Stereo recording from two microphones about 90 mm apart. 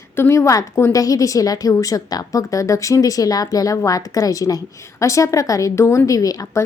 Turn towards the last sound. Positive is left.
turn(degrees=40)  # may be behind; listen again after turning